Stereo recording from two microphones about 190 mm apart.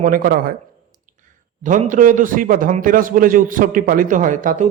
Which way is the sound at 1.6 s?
40° right (ahead or behind).